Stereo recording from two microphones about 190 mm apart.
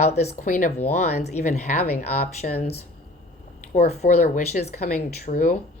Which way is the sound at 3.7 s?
55° left (ahead or behind).